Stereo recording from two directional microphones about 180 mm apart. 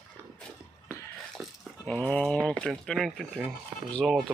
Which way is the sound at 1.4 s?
10° right (ahead or behind).